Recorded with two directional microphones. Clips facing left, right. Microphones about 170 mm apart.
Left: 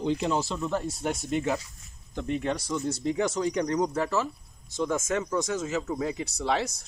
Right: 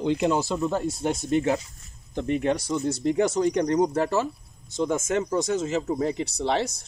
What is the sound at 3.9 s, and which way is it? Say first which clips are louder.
Speech: right 4 dB; 35° right (ahead or behind).